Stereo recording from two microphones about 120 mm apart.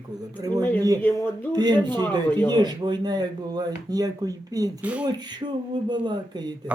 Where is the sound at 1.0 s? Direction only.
20° left (ahead or behind).